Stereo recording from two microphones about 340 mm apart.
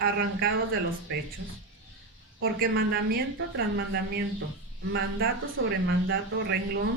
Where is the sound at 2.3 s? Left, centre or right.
Right.